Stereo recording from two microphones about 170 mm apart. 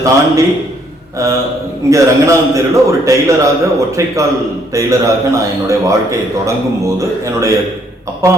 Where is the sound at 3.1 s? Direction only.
20° right (ahead or behind).